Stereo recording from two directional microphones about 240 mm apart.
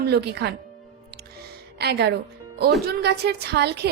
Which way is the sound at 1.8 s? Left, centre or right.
Right.